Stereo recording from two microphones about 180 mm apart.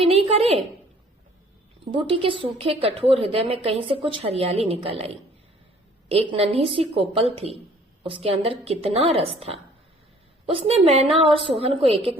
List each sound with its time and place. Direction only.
0.0 s a woman's voice: 30° right (ahead or behind)
1.8 s a woman's voice: 30° right (ahead or behind)